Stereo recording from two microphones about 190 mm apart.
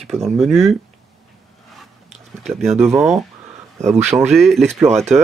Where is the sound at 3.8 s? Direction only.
35° right (ahead or behind).